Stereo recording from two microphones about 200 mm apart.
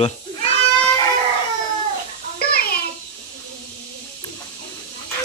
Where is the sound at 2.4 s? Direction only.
50° left (ahead or behind).